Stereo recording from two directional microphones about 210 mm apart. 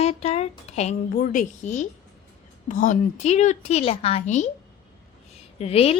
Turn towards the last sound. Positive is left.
turn(degrees=30)  # may be behind; listen again after turning